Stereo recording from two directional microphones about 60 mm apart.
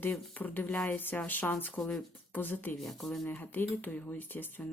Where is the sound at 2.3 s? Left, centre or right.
Left.